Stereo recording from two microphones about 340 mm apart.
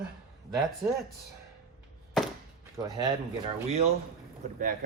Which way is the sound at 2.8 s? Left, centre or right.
Centre.